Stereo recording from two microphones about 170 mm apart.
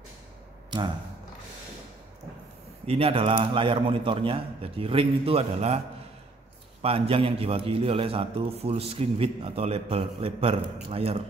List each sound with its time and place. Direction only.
2.9 s a man's voice: 35° right (ahead or behind)
6.8 s a man's voice: 35° right (ahead or behind)